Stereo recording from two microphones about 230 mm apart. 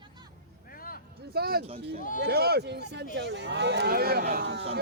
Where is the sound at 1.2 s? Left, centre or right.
Right.